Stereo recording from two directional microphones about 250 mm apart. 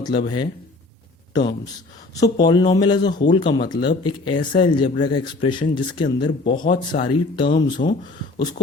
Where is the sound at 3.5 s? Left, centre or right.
Left.